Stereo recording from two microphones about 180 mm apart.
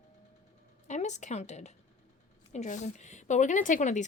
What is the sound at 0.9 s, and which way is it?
A woman's voice, 40° left (ahead or behind).